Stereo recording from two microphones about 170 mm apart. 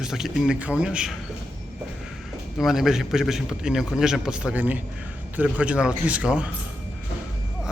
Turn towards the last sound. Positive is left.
turn(degrees=-5)  # may be behind; listen again after turning